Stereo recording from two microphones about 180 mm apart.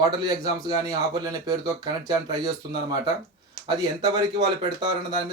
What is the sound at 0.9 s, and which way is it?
Speech, 20° right (ahead or behind).